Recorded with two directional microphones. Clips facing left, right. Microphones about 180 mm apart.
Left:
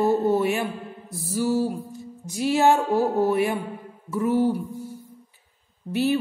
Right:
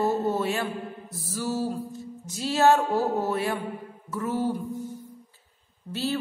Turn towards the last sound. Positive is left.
turn(degrees=15)  # may be behind; listen again after turning